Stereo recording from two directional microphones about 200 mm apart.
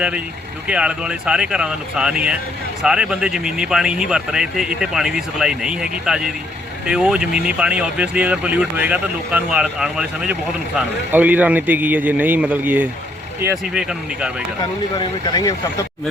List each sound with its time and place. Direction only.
0.7 s a man's voice: 5° right (ahead or behind)
14.9 s speech: 20° left (ahead or behind)